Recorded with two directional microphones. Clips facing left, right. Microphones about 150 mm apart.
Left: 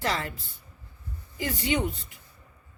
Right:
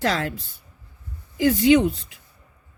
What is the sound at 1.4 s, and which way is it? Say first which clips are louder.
Speech: right 12 dB; 90° right.